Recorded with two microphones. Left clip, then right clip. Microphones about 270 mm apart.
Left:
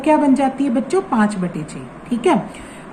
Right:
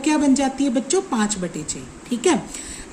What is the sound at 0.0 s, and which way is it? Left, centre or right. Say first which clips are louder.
A woman's voice: left 5 dB; right.